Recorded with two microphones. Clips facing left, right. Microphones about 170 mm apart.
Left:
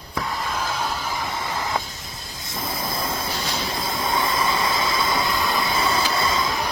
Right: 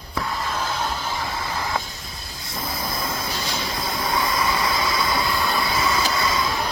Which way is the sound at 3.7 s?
25° left (ahead or behind).